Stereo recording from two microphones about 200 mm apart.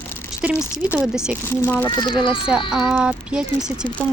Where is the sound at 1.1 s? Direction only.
5° right (ahead or behind).